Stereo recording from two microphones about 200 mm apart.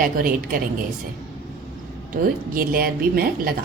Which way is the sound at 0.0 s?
45° right (ahead or behind).